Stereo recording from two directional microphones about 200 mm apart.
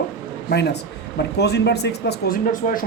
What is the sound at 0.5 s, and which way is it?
Speech, 55° left (ahead or behind).